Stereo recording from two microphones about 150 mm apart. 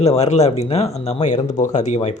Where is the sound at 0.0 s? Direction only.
45° left (ahead or behind).